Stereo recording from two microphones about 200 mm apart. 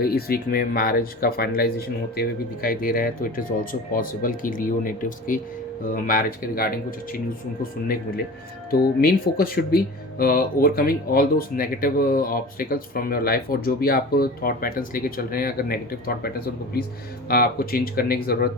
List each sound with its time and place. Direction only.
0.0 s speech: 50° left (ahead or behind)